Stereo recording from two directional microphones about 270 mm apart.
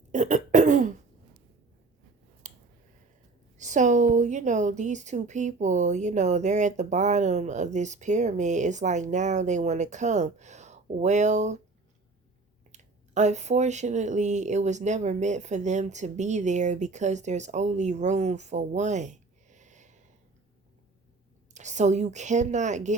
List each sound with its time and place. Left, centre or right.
0.1 s cough: right
2.4 s a sound: right
3.6 s a woman's voice: right
12.7 s a woman's voice: right
21.5 s a woman's voice: right